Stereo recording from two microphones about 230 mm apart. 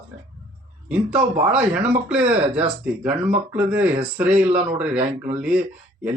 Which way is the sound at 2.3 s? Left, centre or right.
Right.